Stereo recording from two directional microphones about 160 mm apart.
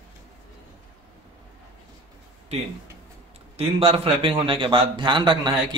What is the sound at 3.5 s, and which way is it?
A man's voice, 35° right (ahead or behind).